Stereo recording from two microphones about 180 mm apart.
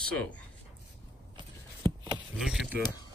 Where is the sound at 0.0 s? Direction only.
5° left (ahead or behind).